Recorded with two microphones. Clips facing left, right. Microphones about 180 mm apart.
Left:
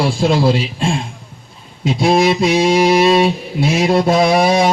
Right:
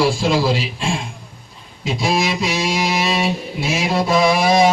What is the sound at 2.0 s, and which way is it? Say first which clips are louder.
Speech: left 7 dB; 55° left (ahead or behind).